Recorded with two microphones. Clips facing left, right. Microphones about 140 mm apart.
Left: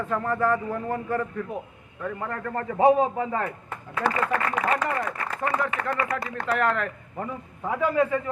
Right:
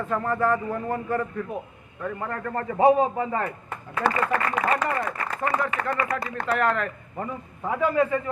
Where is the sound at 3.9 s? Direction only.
30° right (ahead or behind).